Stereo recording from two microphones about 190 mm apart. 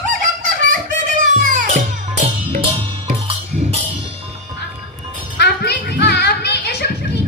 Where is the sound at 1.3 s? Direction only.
45° right (ahead or behind).